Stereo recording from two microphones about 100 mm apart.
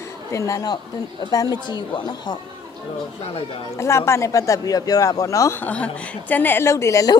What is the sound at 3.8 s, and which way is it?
Speech, 30° left (ahead or behind).